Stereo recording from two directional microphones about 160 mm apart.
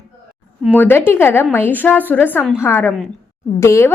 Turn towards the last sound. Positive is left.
turn(degrees=15)  # may be behind; listen again after turning